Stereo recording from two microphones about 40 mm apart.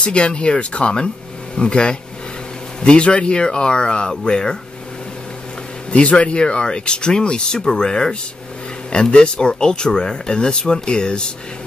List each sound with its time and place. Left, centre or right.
0.0 s speech: left
5.9 s speech: left